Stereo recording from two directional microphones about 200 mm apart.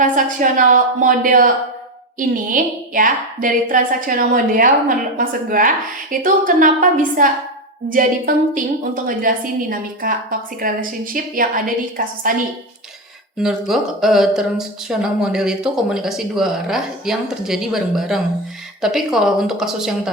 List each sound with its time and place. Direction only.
0.0 s a woman's voice: 40° right (ahead or behind)
13.4 s speech: centre (ahead or behind)